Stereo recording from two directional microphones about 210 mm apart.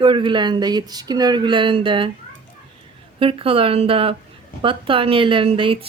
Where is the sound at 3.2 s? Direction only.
25° right (ahead or behind).